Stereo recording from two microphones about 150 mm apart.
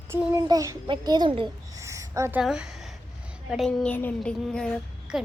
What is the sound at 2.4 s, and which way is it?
A woman's voice, 5° right (ahead or behind).